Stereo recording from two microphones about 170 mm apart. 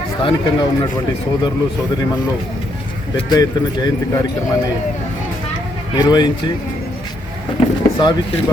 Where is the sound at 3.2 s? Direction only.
25° left (ahead or behind).